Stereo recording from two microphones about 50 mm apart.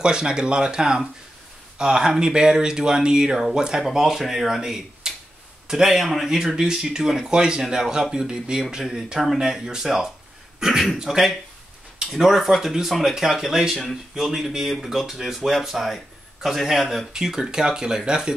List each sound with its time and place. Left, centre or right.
0.0 s a man's voice: centre